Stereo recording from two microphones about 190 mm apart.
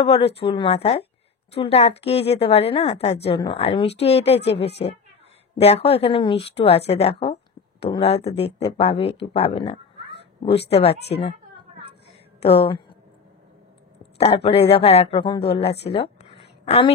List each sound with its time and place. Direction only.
0.0 s a woman's voice: 30° left (ahead or behind)
5.6 s a woman's voice: 30° left (ahead or behind)
12.4 s a woman's voice: 30° left (ahead or behind)
14.1 s a woman's voice: 30° left (ahead or behind)
15.9 s a sound: 30° left (ahead or behind)